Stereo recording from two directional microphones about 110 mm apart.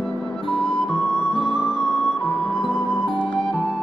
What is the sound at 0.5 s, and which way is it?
Music, 10° left (ahead or behind).